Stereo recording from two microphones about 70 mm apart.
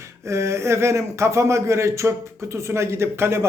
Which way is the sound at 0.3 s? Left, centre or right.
Right.